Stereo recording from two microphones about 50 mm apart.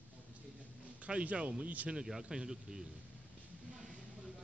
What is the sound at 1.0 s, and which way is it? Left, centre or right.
Speech, right.